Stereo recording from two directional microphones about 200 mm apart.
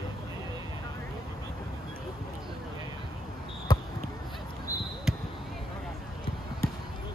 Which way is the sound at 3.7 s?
20° left (ahead or behind).